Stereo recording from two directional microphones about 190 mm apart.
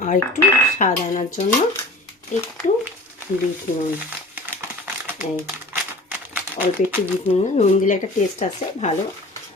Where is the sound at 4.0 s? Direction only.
10° right (ahead or behind).